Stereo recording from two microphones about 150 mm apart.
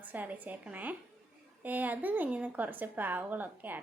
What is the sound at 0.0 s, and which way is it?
A woman's voice, 10° right (ahead or behind).